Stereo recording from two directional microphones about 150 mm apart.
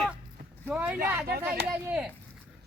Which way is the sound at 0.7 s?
10° right (ahead or behind).